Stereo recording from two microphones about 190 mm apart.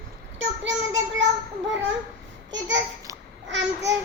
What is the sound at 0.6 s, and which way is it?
Child singing, 70° right (ahead or behind).